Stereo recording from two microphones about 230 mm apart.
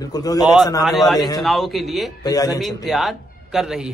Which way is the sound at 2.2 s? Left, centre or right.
Centre.